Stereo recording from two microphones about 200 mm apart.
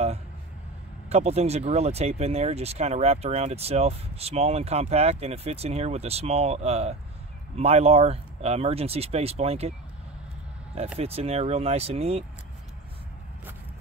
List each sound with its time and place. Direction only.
1.0 s speech: 30° right (ahead or behind)
11.0 s speech: 30° right (ahead or behind)